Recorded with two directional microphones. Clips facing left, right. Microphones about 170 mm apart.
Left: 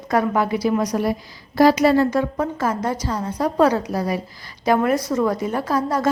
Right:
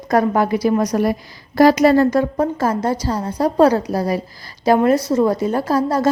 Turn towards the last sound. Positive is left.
turn(degrees=-30)  # may be behind; listen again after turning